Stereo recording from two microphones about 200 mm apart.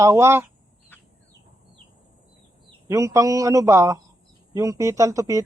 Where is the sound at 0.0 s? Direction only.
15° right (ahead or behind).